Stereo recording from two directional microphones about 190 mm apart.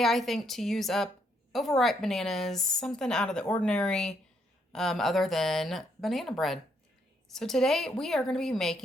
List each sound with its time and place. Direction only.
0.0 s speech: centre (ahead or behind)